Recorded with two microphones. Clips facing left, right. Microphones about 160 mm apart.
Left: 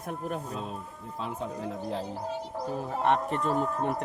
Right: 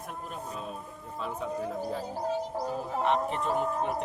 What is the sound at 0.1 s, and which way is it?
Speech, 55° left (ahead or behind).